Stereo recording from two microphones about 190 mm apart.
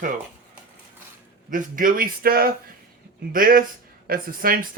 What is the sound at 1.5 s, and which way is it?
Speech, 45° right (ahead or behind).